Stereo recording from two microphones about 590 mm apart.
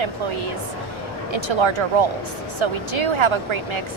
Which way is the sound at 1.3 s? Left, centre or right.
Right.